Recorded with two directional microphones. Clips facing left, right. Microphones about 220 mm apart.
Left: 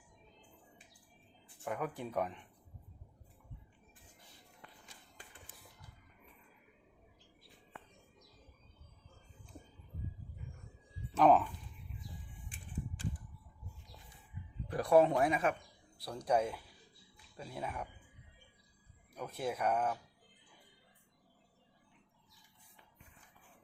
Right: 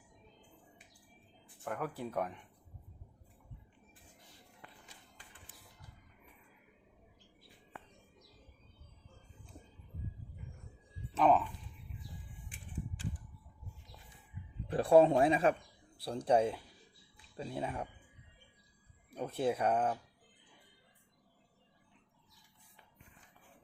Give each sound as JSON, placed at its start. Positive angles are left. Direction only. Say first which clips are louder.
{"t": 1.6, "sound": "speech", "louder": "even", "side_deg": 0}
{"t": 11.2, "sound": "speech", "louder": "left 2 dB", "side_deg": 0}
{"t": 14.7, "sound": "speech", "louder": "right 3 dB", "side_deg": -30}
{"t": 19.1, "sound": "speech", "louder": "right 5 dB", "side_deg": -30}